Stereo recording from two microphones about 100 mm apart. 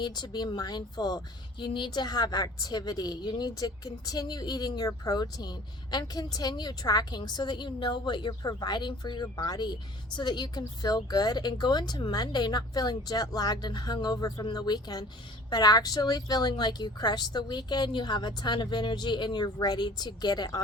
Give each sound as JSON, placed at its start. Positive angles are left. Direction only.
{"t": 0.0, "sound": "speech", "side_deg": 45}